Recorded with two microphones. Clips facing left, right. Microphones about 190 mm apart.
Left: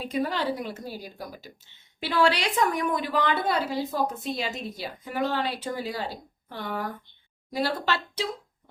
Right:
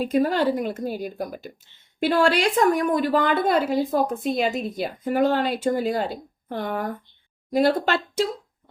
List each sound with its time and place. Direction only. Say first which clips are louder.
0.0 s a woman's voice: right 7 dB; 45° right (ahead or behind)